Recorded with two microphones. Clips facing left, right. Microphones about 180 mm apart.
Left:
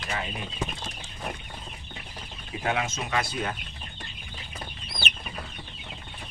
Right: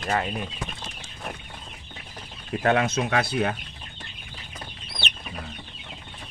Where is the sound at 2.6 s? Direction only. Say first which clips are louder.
Right 7 dB; 65° right (ahead or behind).